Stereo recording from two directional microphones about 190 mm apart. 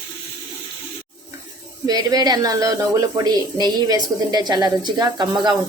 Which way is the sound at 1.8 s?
20° right (ahead or behind).